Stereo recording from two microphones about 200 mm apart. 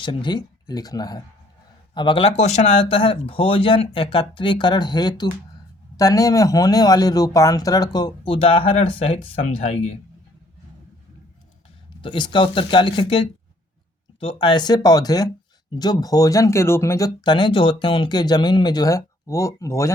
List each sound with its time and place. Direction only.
0.0 s speech: 25° left (ahead or behind)
12.0 s speech: 25° left (ahead or behind)